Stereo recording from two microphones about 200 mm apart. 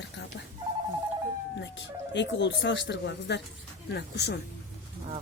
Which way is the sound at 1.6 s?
60° left (ahead or behind).